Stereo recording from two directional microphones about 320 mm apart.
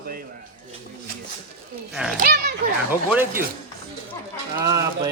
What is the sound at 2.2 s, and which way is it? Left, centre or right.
Speech, right.